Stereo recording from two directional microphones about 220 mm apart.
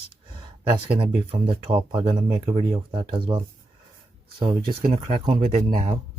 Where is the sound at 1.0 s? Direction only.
25° right (ahead or behind).